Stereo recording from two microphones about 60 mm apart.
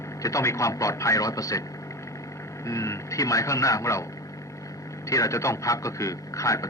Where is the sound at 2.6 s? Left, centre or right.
Left.